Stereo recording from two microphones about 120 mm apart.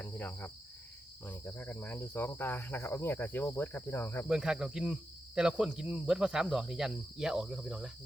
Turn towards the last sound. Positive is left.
turn(degrees=-5)  # may be behind; listen again after turning